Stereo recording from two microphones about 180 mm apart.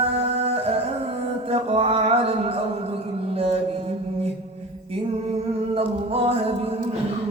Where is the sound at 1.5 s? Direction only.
35° right (ahead or behind).